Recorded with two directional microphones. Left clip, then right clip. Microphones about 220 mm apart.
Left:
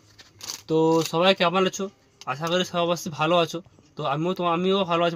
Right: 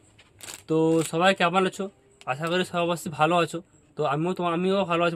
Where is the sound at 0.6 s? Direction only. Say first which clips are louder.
Left 2 dB; 20° right (ahead or behind).